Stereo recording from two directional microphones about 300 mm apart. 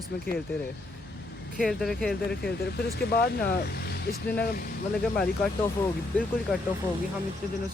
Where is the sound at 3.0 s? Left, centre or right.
Left.